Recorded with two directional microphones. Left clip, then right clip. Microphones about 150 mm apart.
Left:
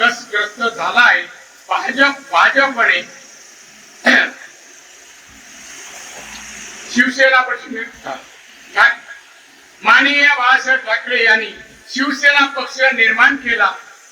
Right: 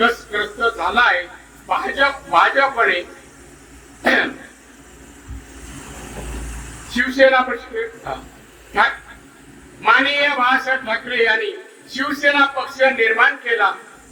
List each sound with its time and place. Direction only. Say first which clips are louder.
0.0 s a sound: left 3 dB; 20° right (ahead or behind)
4.0 s cough: left 4 dB; 20° right (ahead or behind)
6.9 s a man's voice: left 2 dB; 20° right (ahead or behind)
9.8 s a man's voice: left 4 dB; 20° right (ahead or behind)